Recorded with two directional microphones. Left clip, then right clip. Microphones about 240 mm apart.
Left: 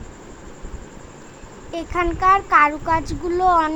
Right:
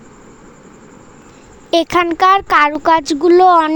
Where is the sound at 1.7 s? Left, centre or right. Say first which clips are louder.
Right 10 dB; right.